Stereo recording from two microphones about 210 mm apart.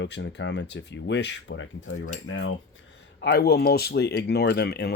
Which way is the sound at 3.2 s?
50° left (ahead or behind).